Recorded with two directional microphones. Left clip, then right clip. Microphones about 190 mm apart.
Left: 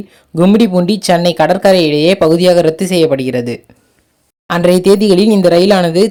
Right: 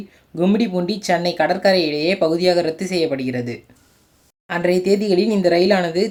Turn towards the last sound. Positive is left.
turn(degrees=40)  # may be behind; listen again after turning